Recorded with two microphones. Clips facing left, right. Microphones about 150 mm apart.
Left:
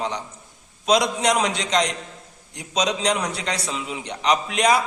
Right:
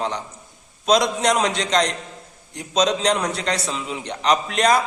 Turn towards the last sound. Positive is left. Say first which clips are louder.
# right 1 dB
turn(degrees=10)  # may be behind; listen again after turning